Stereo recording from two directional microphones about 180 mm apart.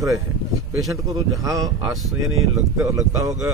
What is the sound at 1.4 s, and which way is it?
Speech, 20° right (ahead or behind).